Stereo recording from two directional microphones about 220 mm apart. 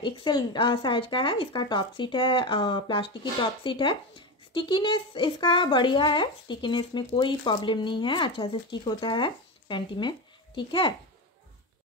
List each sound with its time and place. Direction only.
0.0 s speech: 20° left (ahead or behind)